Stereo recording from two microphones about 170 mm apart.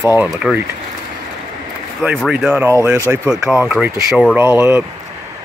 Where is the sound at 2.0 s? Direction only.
Centre (ahead or behind).